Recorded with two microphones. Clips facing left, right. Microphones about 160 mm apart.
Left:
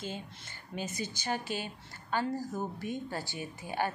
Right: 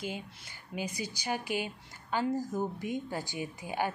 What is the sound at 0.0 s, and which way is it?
Speech, 10° right (ahead or behind).